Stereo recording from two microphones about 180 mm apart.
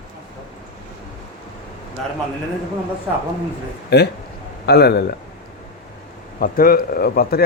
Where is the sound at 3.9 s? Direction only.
65° left (ahead or behind).